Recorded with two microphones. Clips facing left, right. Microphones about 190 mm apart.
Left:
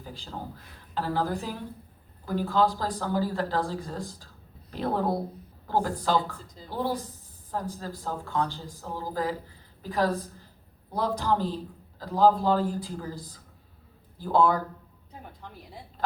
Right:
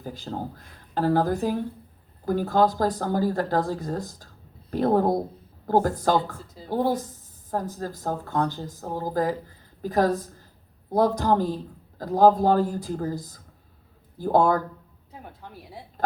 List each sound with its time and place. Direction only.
0.0 s speech: 45° right (ahead or behind)